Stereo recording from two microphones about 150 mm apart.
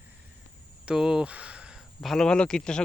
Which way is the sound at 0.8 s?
5° right (ahead or behind).